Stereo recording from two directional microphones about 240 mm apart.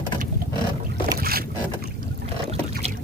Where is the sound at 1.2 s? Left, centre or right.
Right.